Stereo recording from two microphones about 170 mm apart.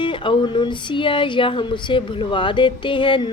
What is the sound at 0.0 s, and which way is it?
A woman's voice, 30° left (ahead or behind).